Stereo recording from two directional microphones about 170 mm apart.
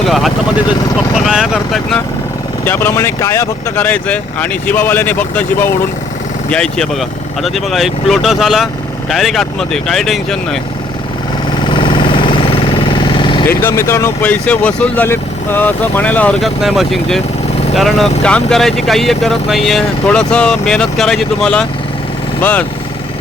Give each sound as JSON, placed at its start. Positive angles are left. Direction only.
{"t": 0.0, "sound": "vehicle", "side_deg": 0}
{"t": 2.6, "sound": "speech", "side_deg": 15}
{"t": 11.7, "sound": "vehicle", "side_deg": 30}
{"t": 13.5, "sound": "speech", "side_deg": 15}